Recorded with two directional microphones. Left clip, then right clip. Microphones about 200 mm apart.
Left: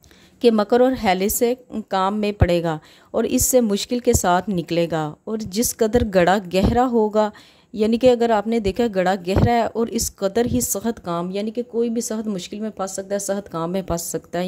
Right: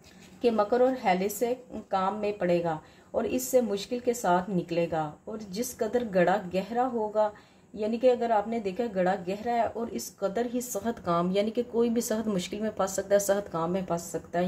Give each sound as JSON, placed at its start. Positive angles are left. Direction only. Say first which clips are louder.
{"t": 0.4, "sound": "a woman's voice", "louder": "left 8 dB", "side_deg": 50}